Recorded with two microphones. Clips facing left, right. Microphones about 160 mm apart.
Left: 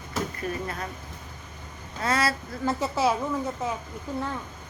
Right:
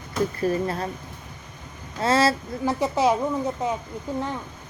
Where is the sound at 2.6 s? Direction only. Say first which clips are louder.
Right 3 dB; 15° right (ahead or behind).